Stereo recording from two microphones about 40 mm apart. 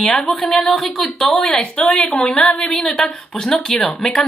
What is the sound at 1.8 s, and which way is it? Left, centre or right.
A woman's voice, left.